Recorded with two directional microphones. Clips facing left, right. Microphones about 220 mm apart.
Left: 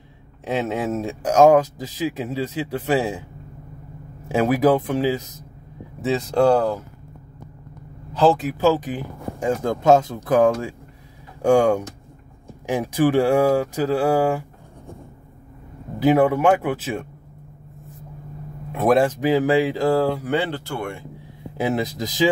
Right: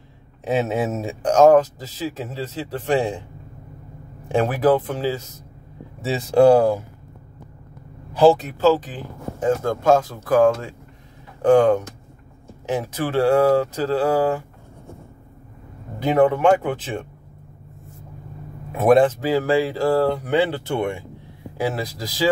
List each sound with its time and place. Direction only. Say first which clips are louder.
0.5 s speech: right 2 dB; centre (ahead or behind)
1.3 s speech: right 1 dB; 10° left (ahead or behind)
4.3 s speech: left 1 dB; 10° left (ahead or behind)
5.9 s speech: right 3 dB; 5° right (ahead or behind)
8.1 s speech: right 3 dB; 10° right (ahead or behind)
8.5 s speech: right 1 dB; 15° left (ahead or behind)
16.0 s speech: even; 5° left (ahead or behind)
18.7 s speech: right 3 dB; centre (ahead or behind)
19.0 s speech: left 1 dB; 15° left (ahead or behind)
20.5 s speech: right 5 dB; 20° right (ahead or behind)
21.5 s speech: left 2 dB; 20° left (ahead or behind)